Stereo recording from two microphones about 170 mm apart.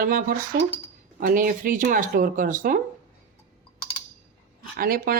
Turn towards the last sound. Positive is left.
turn(degrees=-55)  # may be behind; listen again after turning